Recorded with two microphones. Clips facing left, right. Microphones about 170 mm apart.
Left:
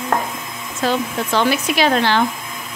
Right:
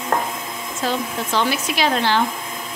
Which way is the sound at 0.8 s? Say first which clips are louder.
Left 4 dB; 60° left (ahead or behind).